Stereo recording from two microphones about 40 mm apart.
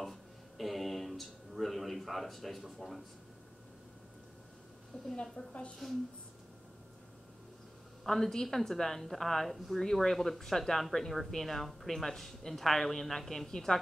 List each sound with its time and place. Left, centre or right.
0.0 s a sound: centre
5.1 s a woman's voice: centre
5.5 s a woman's voice: left
8.0 s speech: centre